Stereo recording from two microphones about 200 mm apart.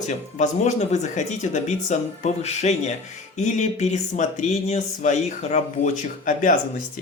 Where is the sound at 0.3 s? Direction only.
35° left (ahead or behind).